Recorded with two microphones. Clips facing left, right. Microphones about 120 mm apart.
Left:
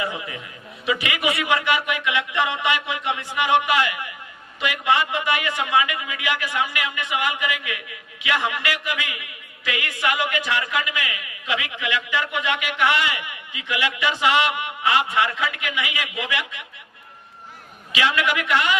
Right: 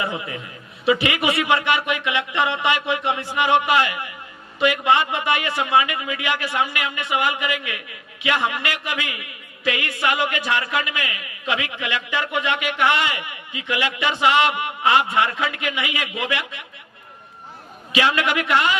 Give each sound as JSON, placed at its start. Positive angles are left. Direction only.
{"t": 0.0, "sound": "a man's voice", "side_deg": -30}
{"t": 17.9, "sound": "a man's voice", "side_deg": -35}